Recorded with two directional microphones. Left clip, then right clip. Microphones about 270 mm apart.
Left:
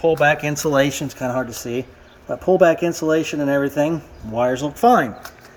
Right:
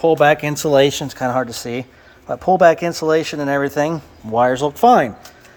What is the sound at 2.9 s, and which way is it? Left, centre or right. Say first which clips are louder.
Speech: right 2 dB; centre.